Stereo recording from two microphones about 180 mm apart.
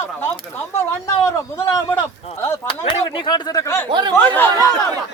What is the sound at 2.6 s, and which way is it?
Speech, 25° left (ahead or behind).